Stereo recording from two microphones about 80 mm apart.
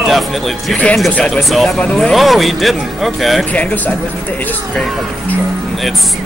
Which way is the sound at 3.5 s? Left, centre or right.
Centre.